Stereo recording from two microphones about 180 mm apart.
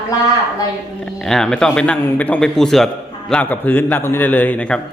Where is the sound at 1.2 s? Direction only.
5° left (ahead or behind).